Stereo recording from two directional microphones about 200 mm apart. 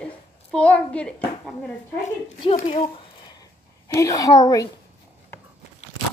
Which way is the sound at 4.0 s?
15° left (ahead or behind).